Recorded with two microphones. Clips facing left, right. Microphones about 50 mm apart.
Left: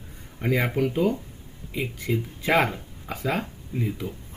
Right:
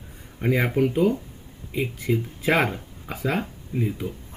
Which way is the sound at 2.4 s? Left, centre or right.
Centre.